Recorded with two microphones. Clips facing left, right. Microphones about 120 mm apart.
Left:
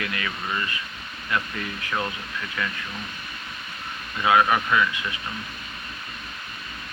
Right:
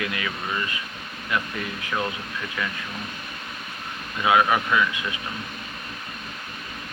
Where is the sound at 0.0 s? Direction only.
15° right (ahead or behind).